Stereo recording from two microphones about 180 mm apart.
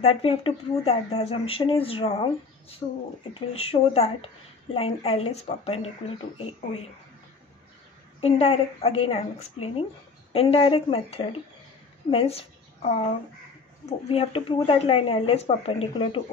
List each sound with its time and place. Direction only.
0.0 s speech: 35° left (ahead or behind)
2.8 s speech: 20° left (ahead or behind)
3.3 s speech: 35° left (ahead or behind)
8.2 s a woman's voice: 35° left (ahead or behind)